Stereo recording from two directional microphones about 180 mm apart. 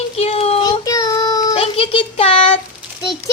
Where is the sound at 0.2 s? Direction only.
35° left (ahead or behind).